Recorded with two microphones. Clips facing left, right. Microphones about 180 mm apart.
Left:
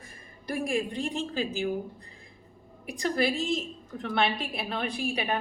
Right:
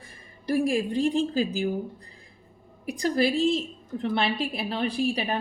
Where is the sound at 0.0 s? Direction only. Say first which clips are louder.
Right 6 dB; 35° right (ahead or behind).